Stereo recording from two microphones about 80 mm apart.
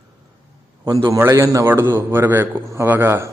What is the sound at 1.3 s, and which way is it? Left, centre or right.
A man's voice, right.